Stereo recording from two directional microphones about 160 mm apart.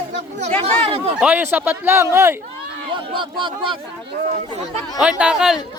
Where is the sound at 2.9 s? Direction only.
30° right (ahead or behind).